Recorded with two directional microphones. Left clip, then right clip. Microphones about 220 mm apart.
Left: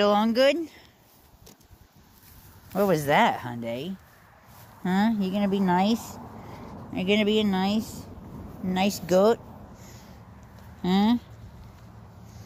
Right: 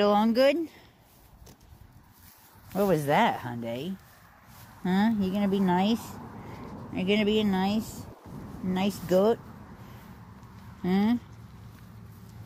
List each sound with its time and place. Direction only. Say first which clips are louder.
0.0 s speech: left 1 dB; centre (ahead or behind)
2.7 s speech: left 2 dB; 10° left (ahead or behind)
10.8 s speech: left 3 dB; 20° left (ahead or behind)